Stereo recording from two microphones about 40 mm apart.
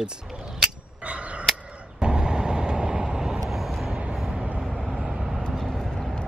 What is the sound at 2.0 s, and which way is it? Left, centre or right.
Vehicle, right.